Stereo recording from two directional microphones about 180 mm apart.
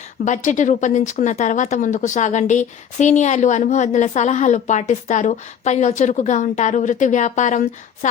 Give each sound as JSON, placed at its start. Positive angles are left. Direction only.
{"t": 0.3, "sound": "speech", "side_deg": 45}